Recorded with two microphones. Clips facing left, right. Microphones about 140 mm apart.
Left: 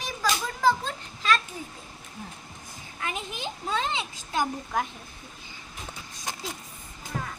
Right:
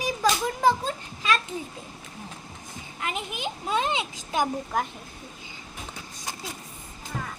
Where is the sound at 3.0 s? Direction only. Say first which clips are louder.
Right 2 dB; 20° right (ahead or behind).